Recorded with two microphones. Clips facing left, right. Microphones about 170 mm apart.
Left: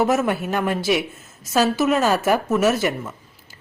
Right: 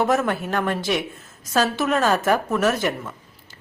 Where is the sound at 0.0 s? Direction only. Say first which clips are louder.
Left 1 dB; 5° left (ahead or behind).